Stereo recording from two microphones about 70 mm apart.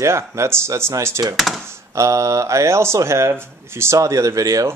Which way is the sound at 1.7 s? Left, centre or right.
Right.